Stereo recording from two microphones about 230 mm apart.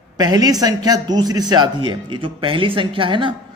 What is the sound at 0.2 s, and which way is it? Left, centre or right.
A man's voice, centre.